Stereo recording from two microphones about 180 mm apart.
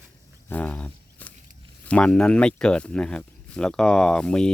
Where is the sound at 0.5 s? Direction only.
10° left (ahead or behind).